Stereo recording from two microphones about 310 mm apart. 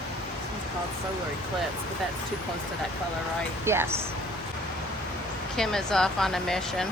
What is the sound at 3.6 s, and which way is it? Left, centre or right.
Speech, centre.